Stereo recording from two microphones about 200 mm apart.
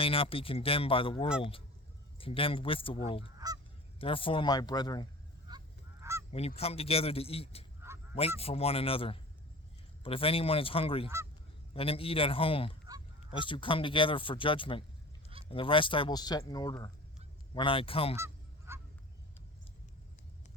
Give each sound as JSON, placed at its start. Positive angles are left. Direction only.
{"t": 0.0, "sound": "speech", "side_deg": 30}
{"t": 3.3, "sound": "goose", "side_deg": -20}
{"t": 3.9, "sound": "speech", "side_deg": 25}
{"t": 5.5, "sound": "goose", "side_deg": -15}
{"t": 6.6, "sound": "speech", "side_deg": 30}
{"t": 18.2, "sound": "goose", "side_deg": -10}